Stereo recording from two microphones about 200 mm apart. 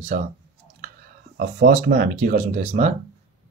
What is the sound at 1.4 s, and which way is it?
Speech, 45° right (ahead or behind).